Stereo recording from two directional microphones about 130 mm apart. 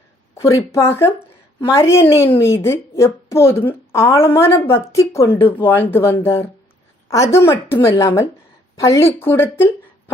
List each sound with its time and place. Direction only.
0.4 s a woman's voice: 25° left (ahead or behind)